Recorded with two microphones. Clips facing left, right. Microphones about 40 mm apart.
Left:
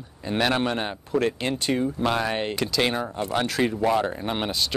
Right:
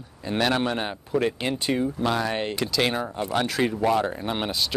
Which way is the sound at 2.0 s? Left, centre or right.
Centre.